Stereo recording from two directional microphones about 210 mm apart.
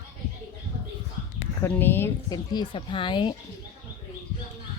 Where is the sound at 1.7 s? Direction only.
10° left (ahead or behind).